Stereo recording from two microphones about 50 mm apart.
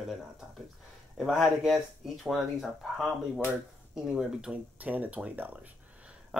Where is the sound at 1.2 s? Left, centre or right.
Centre.